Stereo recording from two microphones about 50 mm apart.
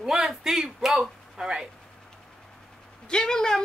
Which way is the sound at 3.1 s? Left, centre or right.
Centre.